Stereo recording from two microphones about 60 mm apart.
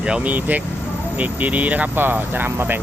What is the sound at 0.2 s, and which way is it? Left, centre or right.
Speech, right.